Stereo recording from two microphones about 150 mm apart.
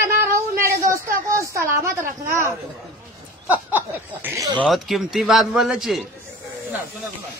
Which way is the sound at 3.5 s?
15° right (ahead or behind).